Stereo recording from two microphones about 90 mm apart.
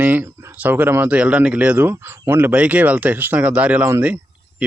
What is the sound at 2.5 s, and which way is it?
Speech, 15° right (ahead or behind).